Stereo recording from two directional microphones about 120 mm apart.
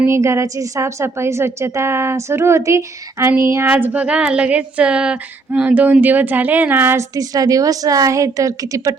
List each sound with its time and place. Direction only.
0.0 s a woman's voice: 25° right (ahead or behind)
7.2 s speech: 30° right (ahead or behind)